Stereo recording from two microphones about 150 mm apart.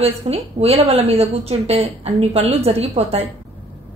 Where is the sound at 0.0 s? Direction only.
45° right (ahead or behind).